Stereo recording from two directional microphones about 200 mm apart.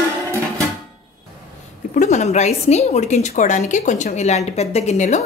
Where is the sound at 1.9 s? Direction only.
35° left (ahead or behind).